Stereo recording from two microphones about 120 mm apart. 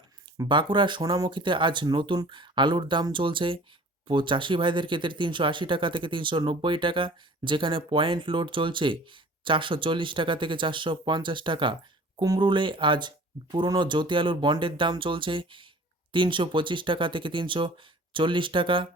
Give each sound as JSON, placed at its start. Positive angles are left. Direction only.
{"t": 0.3, "sound": "speech", "side_deg": -40}